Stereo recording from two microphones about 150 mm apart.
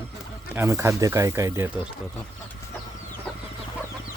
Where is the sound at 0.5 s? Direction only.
15° right (ahead or behind).